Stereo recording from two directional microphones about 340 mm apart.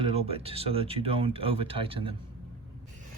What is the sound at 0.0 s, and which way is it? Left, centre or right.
Speech, centre.